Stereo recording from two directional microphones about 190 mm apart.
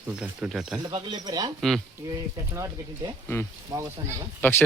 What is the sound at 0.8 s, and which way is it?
Speech, 25° right (ahead or behind).